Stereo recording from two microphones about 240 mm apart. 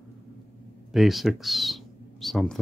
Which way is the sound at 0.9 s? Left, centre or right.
Centre.